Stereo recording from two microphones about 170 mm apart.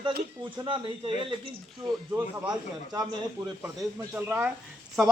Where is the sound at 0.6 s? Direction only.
30° right (ahead or behind).